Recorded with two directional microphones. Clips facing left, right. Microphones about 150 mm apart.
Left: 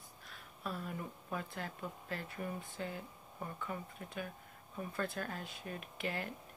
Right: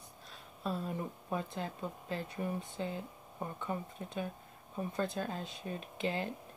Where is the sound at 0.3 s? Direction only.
25° right (ahead or behind).